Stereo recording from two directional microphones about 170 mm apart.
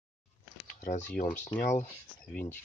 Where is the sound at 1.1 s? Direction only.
50° left (ahead or behind).